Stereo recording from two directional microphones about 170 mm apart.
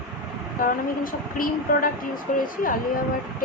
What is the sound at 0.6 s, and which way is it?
Speech, 55° left (ahead or behind).